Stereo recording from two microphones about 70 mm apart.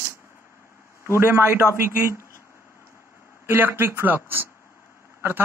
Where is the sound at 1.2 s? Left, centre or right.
Right.